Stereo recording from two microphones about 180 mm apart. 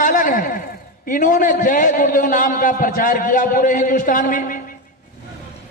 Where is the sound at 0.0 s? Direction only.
50° left (ahead or behind).